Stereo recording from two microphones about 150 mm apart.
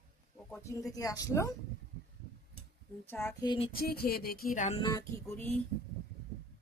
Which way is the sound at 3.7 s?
85° left.